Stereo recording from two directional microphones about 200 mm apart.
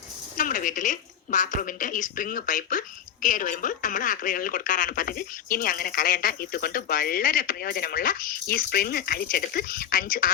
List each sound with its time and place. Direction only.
0.3 s speech: 45° left (ahead or behind)